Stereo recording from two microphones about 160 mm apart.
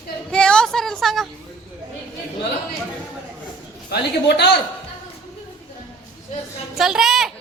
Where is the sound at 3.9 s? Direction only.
90° left.